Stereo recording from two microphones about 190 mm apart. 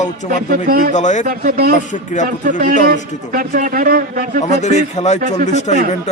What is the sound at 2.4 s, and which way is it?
A man's voice, 45° right (ahead or behind).